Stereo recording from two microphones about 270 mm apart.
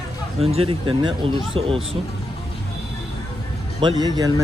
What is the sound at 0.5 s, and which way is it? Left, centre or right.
Speech, centre.